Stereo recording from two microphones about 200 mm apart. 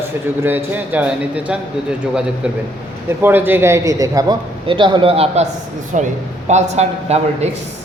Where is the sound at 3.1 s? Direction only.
10° right (ahead or behind); by 7.5 s 35° right (ahead or behind).